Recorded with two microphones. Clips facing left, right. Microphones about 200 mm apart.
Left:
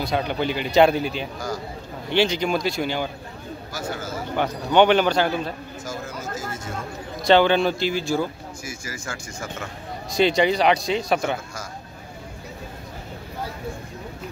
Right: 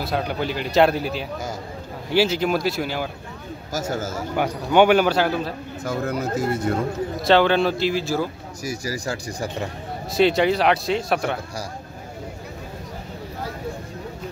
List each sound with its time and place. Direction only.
0.0 s a man's voice: centre (ahead or behind)
3.7 s speech: 45° right (ahead or behind)
4.4 s a man's voice: 10° right (ahead or behind)
5.9 s speech: 60° right (ahead or behind)
7.2 s a man's voice: centre (ahead or behind)
8.6 s speech: 35° right (ahead or behind)
10.1 s a man's voice: centre (ahead or behind)